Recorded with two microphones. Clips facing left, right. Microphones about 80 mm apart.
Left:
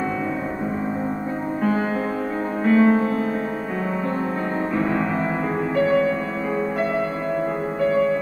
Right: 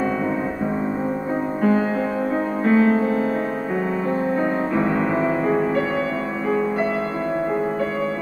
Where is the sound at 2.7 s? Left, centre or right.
Right.